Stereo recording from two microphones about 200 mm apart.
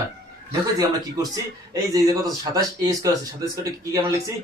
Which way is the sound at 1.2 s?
15° right (ahead or behind).